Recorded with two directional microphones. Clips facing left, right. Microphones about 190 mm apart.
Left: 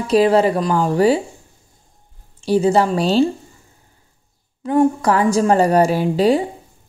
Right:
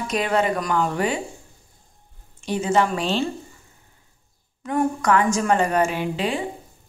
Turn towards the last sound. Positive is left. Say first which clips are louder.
# left 9 dB
turn(degrees=35)  # may be behind; listen again after turning